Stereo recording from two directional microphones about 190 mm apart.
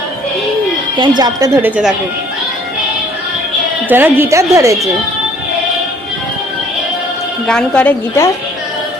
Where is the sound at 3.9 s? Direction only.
10° right (ahead or behind).